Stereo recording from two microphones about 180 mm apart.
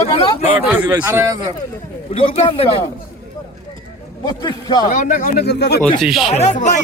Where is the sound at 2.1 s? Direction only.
30° left (ahead or behind).